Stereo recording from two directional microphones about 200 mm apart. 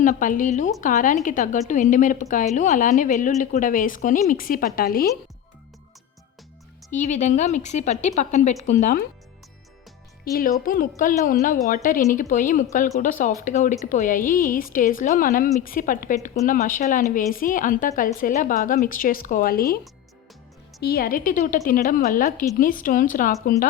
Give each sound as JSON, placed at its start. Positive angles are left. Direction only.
{"t": 0.0, "sound": "a woman's voice", "side_deg": 40}
{"t": 6.9, "sound": "a woman's voice", "side_deg": 35}
{"t": 10.6, "sound": "a woman's voice", "side_deg": 45}
{"t": 20.8, "sound": "a woman's voice", "side_deg": 50}